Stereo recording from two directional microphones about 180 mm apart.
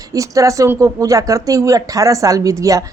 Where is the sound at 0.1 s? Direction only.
20° right (ahead or behind).